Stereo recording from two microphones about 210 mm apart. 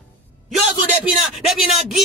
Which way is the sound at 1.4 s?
Centre (ahead or behind).